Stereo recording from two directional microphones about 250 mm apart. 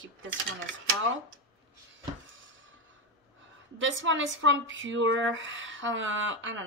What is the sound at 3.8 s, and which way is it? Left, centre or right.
Speech, right.